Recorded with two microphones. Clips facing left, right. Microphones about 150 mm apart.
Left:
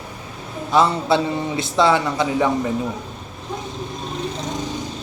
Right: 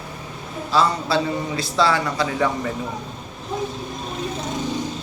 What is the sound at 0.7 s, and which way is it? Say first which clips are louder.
A man's voice: left 3 dB; 20° left (ahead or behind).